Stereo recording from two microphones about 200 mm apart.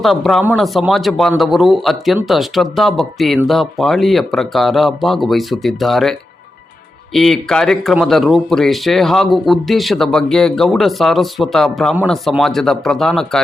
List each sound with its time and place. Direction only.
0.0 s speech: centre (ahead or behind)